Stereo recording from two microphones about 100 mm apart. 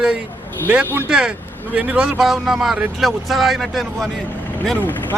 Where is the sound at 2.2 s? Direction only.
5° right (ahead or behind).